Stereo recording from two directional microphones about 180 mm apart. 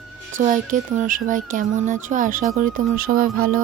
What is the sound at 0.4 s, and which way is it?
Speech, 45° right (ahead or behind).